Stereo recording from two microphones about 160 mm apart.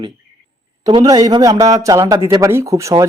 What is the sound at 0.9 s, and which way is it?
A man's voice, 25° right (ahead or behind).